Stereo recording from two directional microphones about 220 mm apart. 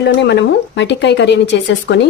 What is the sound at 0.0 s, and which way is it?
Speech, 50° left (ahead or behind).